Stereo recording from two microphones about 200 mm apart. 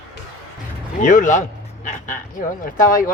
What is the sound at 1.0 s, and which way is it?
Speech, 40° left (ahead or behind).